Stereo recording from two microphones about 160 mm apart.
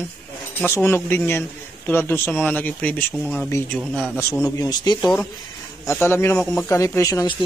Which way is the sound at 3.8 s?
Centre (ahead or behind).